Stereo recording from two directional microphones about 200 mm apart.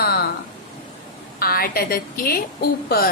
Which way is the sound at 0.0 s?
50° left (ahead or behind).